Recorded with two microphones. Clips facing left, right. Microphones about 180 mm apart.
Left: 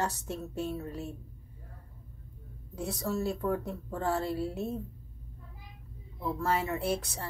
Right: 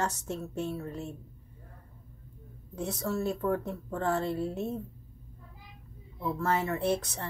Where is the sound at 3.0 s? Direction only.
15° left (ahead or behind).